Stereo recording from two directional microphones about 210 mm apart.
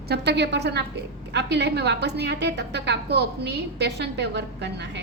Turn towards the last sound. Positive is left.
turn(degrees=-55)  # may be behind; listen again after turning